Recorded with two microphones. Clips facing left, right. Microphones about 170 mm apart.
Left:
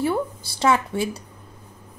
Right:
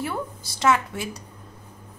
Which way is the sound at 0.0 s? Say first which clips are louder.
Left 6 dB; 30° left (ahead or behind).